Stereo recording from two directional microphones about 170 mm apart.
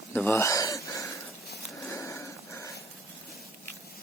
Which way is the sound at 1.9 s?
15° left (ahead or behind).